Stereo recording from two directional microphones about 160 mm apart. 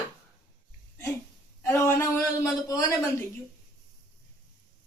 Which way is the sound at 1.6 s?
15° left (ahead or behind).